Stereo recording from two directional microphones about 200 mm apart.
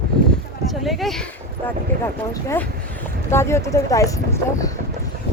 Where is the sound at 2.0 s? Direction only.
10° left (ahead or behind).